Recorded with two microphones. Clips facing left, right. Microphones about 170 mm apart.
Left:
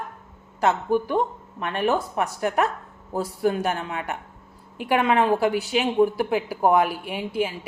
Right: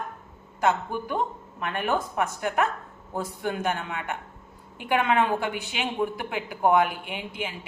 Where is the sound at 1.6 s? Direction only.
30° left (ahead or behind).